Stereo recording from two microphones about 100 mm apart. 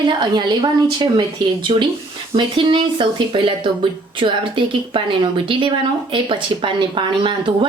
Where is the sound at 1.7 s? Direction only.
60° right (ahead or behind).